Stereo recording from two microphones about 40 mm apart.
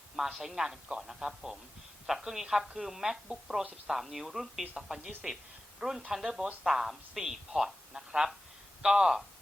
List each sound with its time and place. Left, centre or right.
0.2 s a woman's voice: centre